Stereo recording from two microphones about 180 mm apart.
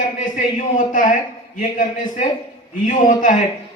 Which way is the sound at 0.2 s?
45° left (ahead or behind).